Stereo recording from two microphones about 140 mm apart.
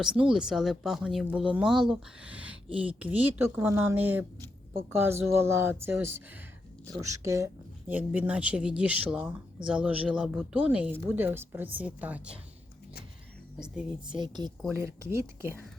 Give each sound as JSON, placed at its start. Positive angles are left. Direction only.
{"t": 0.0, "sound": "speech", "side_deg": -5}
{"t": 14.1, "sound": "speech", "side_deg": -30}
{"t": 14.7, "sound": "speech", "side_deg": -20}